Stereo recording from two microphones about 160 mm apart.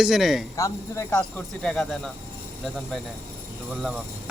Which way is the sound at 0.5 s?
20° left (ahead or behind).